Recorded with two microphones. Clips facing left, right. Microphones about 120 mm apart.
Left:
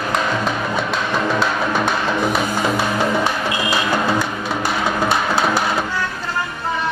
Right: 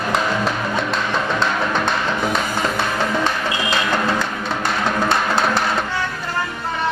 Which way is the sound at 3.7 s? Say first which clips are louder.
Left 1 dB; 10° left (ahead or behind).